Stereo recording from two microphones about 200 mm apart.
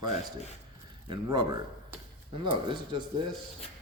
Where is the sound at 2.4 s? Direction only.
25° right (ahead or behind).